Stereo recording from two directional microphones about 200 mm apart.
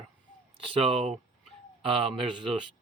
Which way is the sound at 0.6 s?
30° right (ahead or behind).